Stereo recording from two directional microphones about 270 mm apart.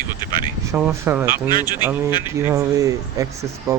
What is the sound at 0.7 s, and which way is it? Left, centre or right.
Speech, centre.